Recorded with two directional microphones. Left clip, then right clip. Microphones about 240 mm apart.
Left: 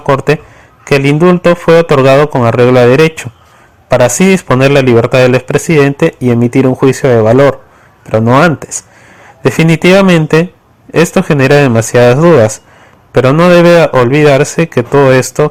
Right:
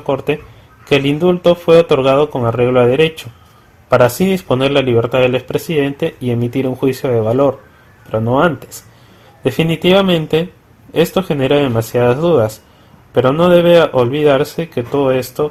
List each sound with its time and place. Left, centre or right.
0.1 s speech: left
9.8 s speech: left